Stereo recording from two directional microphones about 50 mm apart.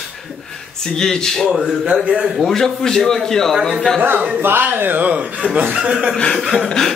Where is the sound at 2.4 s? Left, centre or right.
Centre.